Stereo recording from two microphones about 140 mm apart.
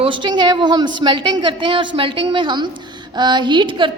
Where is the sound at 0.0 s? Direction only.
35° right (ahead or behind).